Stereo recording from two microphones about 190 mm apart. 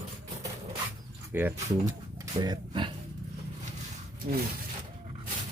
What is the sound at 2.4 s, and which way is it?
Speech, 25° right (ahead or behind).